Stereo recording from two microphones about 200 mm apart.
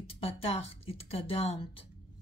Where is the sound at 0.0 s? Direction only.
30° left (ahead or behind).